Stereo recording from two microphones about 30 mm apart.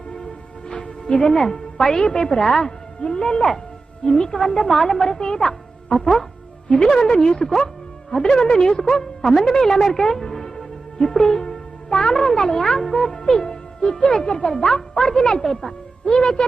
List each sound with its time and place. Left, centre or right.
0.7 s music: left
1.3 s a woman's voice: centre
12.9 s music: left
14.3 s a woman's voice: left
15.4 s a woman's voice: centre
16.0 s a woman's voice: left